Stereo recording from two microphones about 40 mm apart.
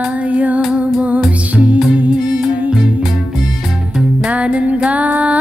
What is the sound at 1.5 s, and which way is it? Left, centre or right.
Music, right.